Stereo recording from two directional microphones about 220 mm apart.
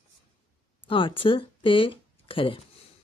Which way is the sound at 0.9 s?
25° left (ahead or behind).